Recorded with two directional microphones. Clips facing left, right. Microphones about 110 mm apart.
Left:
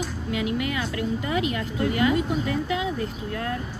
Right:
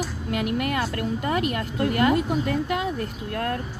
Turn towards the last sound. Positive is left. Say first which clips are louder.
# right 2 dB
turn(degrees=-55)  # may be behind; listen again after turning